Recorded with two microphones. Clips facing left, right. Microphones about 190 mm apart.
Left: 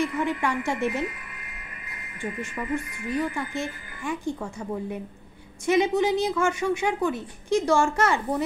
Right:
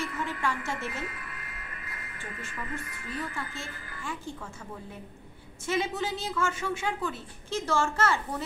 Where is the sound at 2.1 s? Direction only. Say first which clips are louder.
Left 10 dB; 15° left (ahead or behind).